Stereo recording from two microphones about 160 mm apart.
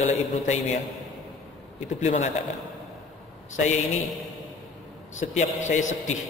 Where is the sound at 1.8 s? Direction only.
45° left (ahead or behind).